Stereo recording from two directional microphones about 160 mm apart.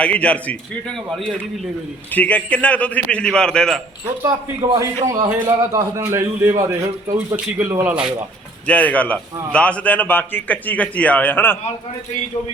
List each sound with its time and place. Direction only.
0.0 s a man's voice: 10° left (ahead or behind)
2.1 s a man's voice: 10° left (ahead or behind)
4.8 s a man's voice: 20° right (ahead or behind)
8.6 s a man's voice: 10° left (ahead or behind)